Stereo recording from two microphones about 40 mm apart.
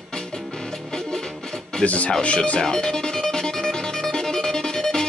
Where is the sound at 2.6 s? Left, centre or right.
Centre.